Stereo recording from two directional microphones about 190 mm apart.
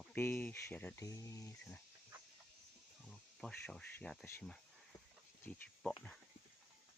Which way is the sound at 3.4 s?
5° left (ahead or behind).